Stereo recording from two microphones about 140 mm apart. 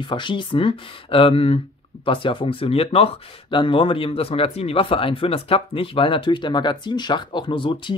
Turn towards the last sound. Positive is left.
turn(degrees=35)  # may be behind; listen again after turning